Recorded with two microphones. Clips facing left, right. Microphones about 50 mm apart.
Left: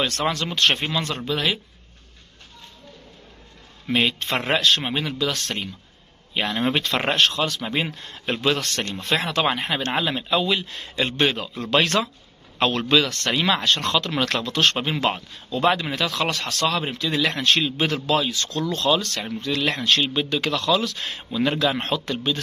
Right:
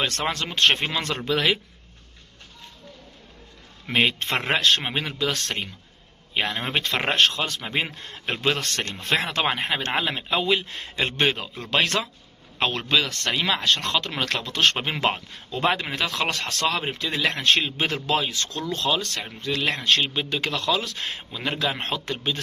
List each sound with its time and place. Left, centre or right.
0.2 s speech: right
0.9 s speech: right
3.8 s a man's voice: right
6.3 s speech: right
7.3 s a man's voice: right; by 13.4 s centre
13.4 s speech: centre
13.8 s speech: centre
14.5 s speech: right
21.3 s speech: centre